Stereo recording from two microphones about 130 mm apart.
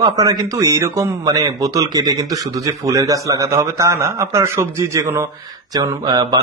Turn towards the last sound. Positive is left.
turn(degrees=-30)  # may be behind; listen again after turning